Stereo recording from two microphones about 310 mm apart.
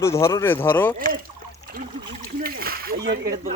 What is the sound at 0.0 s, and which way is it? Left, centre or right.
Speech, centre.